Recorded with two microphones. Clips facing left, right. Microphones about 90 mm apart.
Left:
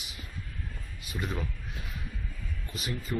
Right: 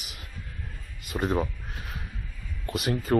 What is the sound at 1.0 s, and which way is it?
Speech, 45° right (ahead or behind).